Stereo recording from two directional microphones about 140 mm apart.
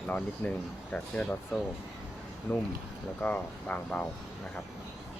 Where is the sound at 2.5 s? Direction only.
10° left (ahead or behind).